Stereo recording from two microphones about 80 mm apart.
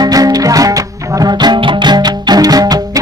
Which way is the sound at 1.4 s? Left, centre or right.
Right.